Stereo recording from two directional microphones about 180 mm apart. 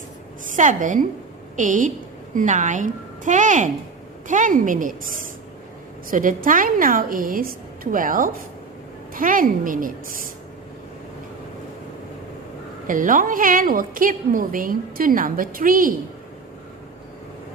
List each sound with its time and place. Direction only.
0.5 s a woman's voice: 45° right (ahead or behind)
6.1 s a woman's voice: 50° right (ahead or behind)
12.9 s a woman's voice: 50° right (ahead or behind)